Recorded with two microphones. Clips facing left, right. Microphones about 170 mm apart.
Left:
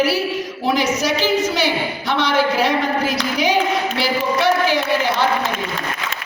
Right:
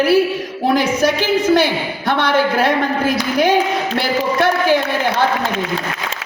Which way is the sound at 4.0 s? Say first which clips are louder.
Right 4 dB; 50° right (ahead or behind).